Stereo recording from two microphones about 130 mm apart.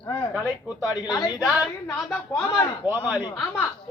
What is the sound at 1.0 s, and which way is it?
Speech, 35° left (ahead or behind).